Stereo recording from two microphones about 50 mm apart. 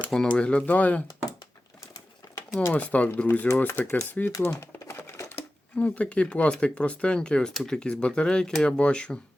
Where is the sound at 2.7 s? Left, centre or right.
Left.